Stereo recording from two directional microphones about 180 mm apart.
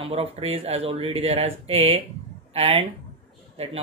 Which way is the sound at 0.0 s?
35° right (ahead or behind).